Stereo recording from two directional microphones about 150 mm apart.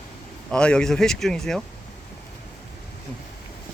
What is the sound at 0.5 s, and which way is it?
Speech, 5° left (ahead or behind).